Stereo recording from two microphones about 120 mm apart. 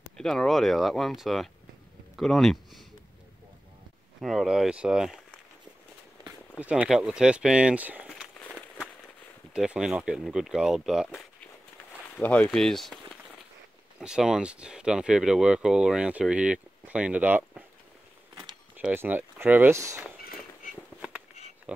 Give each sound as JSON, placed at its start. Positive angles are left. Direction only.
{"t": 0.2, "sound": "speech", "side_deg": 5}
{"t": 4.2, "sound": "speech", "side_deg": 0}
{"t": 6.5, "sound": "speech", "side_deg": -10}
{"t": 8.4, "sound": "walk", "side_deg": 10}
{"t": 9.5, "sound": "speech", "side_deg": -5}
{"t": 12.2, "sound": "speech", "side_deg": 10}
{"t": 18.8, "sound": "speech", "side_deg": -15}
{"t": 21.7, "sound": "speech", "side_deg": -10}